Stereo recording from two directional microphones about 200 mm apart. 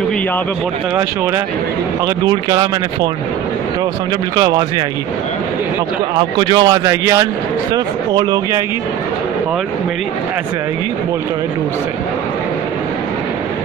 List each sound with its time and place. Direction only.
2.2 s speech: 20° right (ahead or behind)
4.4 s speech: 20° right (ahead or behind)
6.1 s speech: 20° right (ahead or behind)